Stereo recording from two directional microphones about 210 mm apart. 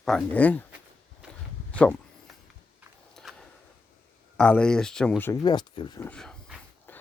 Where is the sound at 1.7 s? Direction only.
5° left (ahead or behind).